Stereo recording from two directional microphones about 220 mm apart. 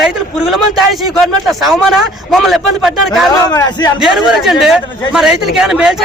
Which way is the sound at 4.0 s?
Centre (ahead or behind).